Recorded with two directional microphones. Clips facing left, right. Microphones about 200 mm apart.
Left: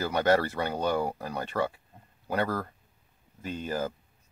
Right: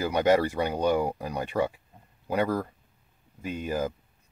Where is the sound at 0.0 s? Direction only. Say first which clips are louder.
Right 2 dB; 15° right (ahead or behind).